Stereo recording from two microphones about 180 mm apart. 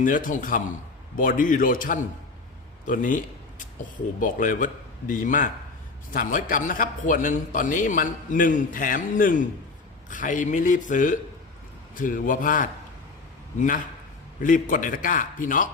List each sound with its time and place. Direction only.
0.0 s a man's voice: 45° left (ahead or behind)
4.2 s a man's voice: 50° left (ahead or behind)